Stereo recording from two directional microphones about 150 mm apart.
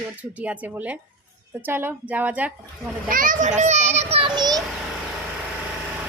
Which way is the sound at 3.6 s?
50° right (ahead or behind).